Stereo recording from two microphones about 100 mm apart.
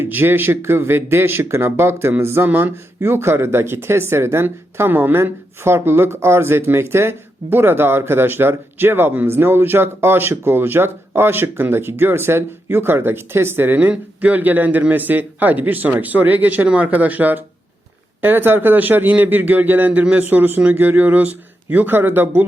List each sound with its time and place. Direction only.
0.0 s speech: 20° right (ahead or behind)